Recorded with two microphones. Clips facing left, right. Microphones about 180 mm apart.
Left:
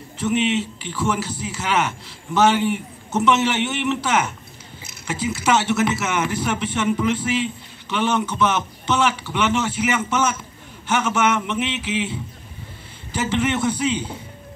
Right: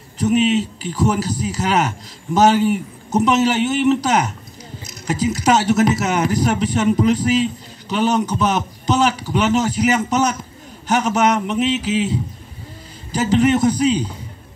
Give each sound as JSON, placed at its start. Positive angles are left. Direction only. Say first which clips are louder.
{"t": 0.2, "sound": "a man's voice", "louder": "right 5 dB", "side_deg": -40}